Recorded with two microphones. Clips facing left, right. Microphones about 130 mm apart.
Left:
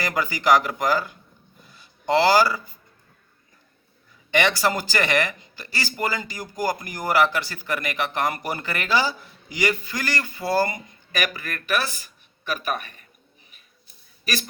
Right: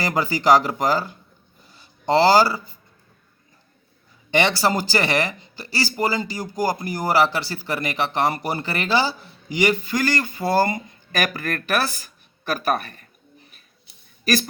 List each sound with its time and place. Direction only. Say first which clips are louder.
0.0 s speech: right 3 dB; 30° right (ahead or behind)
1.7 s a sound: right 2 dB; 30° right (ahead or behind)
4.4 s speech: right 2 dB; 30° right (ahead or behind)
11.2 s speech: right 4 dB; 40° right (ahead or behind)